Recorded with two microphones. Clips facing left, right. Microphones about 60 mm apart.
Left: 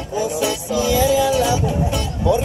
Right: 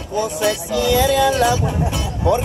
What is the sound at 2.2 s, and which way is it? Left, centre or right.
Speech, right.